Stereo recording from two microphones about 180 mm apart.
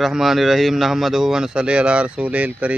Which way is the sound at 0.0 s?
Centre (ahead or behind).